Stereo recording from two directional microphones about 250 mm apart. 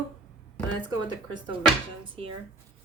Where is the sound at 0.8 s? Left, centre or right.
Centre.